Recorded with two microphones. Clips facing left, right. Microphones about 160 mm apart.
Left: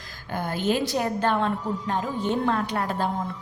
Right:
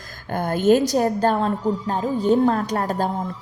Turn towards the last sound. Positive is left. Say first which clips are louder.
# right 4 dB
turn(degrees=-40)  # may be behind; listen again after turning